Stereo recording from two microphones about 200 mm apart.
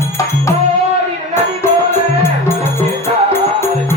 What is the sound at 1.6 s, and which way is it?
Music, 10° left (ahead or behind).